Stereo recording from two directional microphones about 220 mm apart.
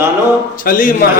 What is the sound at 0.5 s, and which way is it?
Speech, 40° left (ahead or behind).